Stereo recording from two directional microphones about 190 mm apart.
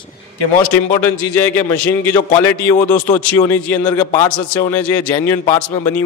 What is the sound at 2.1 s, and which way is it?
A man's voice, 10° left (ahead or behind).